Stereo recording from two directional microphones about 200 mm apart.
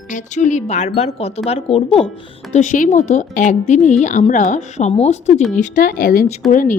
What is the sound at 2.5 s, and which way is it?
Speech, 40° left (ahead or behind).